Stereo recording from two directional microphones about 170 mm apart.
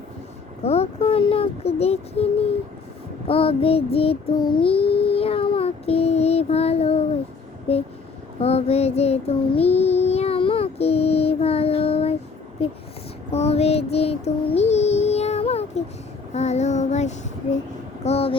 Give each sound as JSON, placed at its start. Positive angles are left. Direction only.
{"t": 0.6, "sound": "child singing", "side_deg": 35}